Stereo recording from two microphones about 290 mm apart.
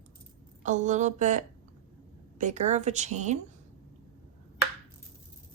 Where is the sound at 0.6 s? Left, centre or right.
Right.